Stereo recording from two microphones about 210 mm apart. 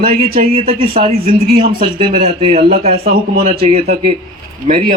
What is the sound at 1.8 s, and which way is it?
Speech, 30° right (ahead or behind).